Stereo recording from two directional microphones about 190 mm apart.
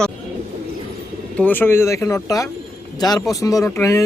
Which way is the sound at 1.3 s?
10° left (ahead or behind).